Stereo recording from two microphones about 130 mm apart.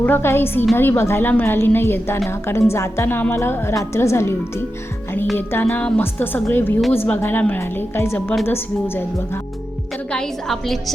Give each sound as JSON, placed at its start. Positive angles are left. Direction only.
{"t": 0.0, "sound": "a woman's voice", "side_deg": 15}
{"t": 10.1, "sound": "a woman's voice", "side_deg": 5}